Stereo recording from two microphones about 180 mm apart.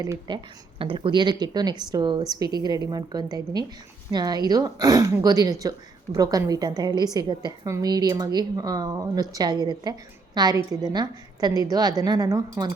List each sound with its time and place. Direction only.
0.0 s speech: 20° right (ahead or behind)